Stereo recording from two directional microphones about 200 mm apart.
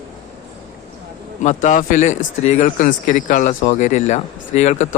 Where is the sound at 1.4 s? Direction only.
35° left (ahead or behind).